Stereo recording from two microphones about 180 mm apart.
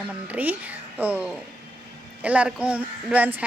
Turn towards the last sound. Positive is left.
turn(degrees=-10)  # may be behind; listen again after turning